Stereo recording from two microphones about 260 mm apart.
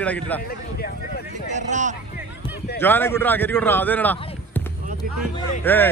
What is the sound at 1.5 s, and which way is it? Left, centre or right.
Speech, right.